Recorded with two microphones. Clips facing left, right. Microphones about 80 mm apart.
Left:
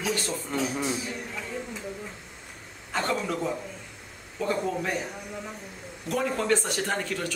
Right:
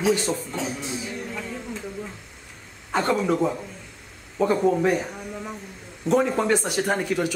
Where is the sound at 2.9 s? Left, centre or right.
Right.